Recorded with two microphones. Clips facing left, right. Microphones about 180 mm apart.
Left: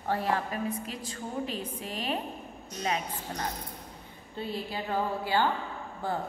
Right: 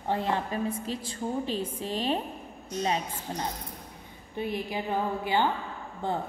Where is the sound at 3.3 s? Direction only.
20° right (ahead or behind).